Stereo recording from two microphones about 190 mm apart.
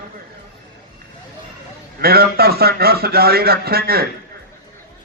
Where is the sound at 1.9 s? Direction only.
55° right (ahead or behind).